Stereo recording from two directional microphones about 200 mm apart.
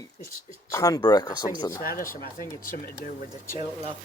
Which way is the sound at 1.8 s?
45° left (ahead or behind).